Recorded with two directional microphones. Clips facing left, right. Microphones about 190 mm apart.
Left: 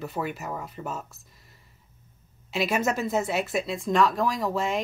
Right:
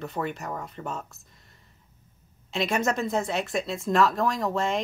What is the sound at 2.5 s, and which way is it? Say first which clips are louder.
Speech: even; 5° left (ahead or behind).